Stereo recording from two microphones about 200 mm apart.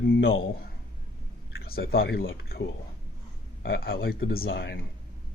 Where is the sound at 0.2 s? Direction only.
75° left (ahead or behind).